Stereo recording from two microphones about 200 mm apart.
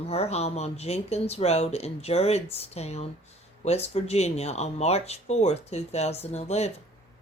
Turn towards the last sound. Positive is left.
turn(degrees=30)  # may be behind; listen again after turning